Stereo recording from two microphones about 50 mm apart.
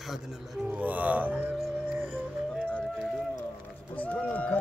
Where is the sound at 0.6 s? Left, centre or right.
Right.